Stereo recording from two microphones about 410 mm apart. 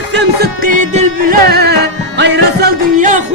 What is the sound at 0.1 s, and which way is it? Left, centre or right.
Music, right.